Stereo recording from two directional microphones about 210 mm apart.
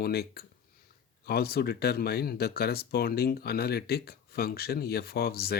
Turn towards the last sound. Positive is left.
turn(degrees=50)  # may be behind; listen again after turning